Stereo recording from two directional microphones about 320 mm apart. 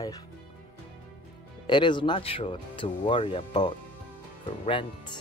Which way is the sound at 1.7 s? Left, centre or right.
Centre.